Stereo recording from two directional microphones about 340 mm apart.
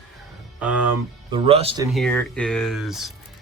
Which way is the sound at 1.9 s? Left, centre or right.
Centre.